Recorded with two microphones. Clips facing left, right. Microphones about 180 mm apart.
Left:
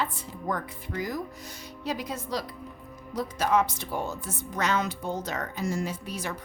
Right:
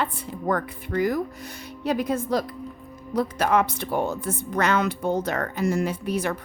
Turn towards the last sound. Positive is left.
turn(degrees=-60)  # may be behind; listen again after turning